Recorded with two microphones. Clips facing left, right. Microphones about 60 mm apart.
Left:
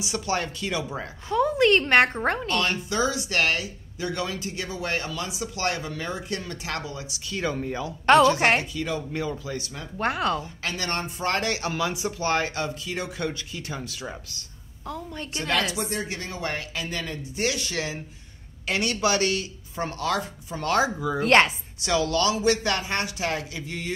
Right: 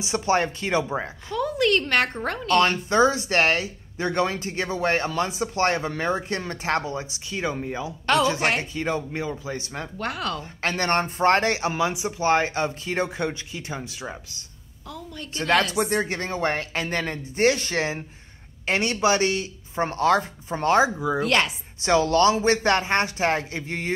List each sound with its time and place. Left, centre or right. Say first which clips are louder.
0.0 s speech: right 5 dB; right
1.3 s speech: left 2 dB; left
2.9 s speech: right 6 dB; right; by 7.9 s centre
8.4 s a woman's voice: left 2 dB; left
8.7 s speech: right 2 dB; right
9.9 s speech: left 5 dB; left
10.6 s speech: right 6 dB; right
14.9 s a woman's voice: left 3 dB; left
15.3 s speech: right 5 dB; right
21.2 s a woman's voice: left 5 dB; left
21.8 s speech: right 5 dB; right